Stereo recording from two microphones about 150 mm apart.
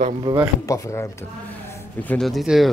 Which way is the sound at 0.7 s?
20° left (ahead or behind).